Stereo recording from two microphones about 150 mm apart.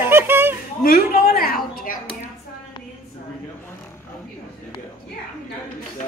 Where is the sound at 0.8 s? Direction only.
75° left (ahead or behind).